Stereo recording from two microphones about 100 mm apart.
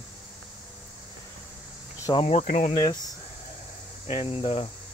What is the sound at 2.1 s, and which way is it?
Speech, 90° left.